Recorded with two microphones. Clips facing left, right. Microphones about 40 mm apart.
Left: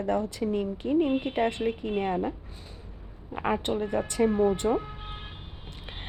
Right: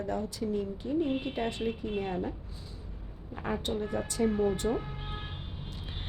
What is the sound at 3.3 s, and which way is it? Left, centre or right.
A woman's voice, left.